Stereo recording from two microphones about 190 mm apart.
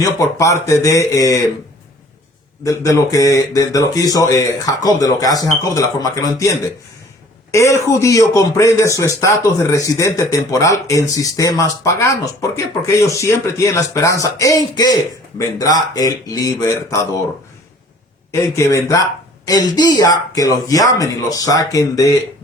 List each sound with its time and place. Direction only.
0.0 s speech: 15° left (ahead or behind)
2.6 s speech: 15° left (ahead or behind)
18.3 s speech: 15° left (ahead or behind)